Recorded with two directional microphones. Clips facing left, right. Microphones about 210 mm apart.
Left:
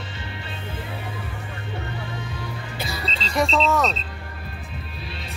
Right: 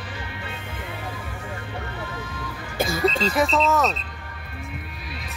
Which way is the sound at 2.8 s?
45° right (ahead or behind).